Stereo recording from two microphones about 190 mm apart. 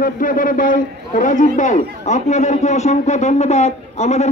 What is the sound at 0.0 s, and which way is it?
A man's voice, 45° left (ahead or behind).